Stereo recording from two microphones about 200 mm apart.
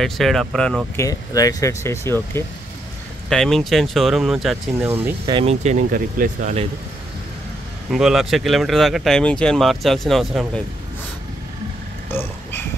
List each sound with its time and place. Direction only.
0.0 s speech: centre (ahead or behind)
0.9 s speech: 15° left (ahead or behind)
3.3 s speech: centre (ahead or behind)
5.2 s speech: 30° right (ahead or behind)
7.9 s speech: centre (ahead or behind)
12.1 s a sound: 10° left (ahead or behind)